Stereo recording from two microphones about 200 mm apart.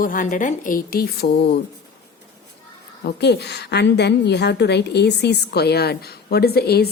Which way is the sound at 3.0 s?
55° left (ahead or behind).